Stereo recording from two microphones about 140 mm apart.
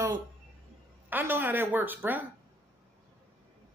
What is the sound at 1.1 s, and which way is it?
Speech, 15° right (ahead or behind).